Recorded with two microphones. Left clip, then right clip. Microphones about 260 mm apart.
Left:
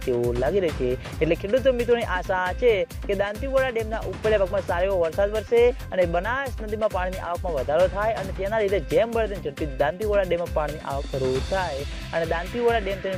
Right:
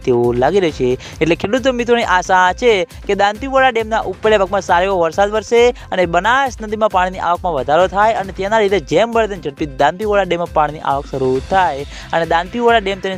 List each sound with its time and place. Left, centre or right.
0.1 s speech: right
12.1 s speech: right